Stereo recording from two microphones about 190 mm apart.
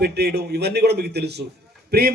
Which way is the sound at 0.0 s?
60° right (ahead or behind).